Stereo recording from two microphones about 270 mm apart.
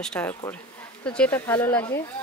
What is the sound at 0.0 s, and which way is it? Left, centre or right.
Speech, centre.